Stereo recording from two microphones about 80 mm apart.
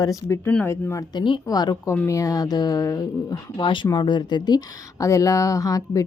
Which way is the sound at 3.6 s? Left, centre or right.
Left.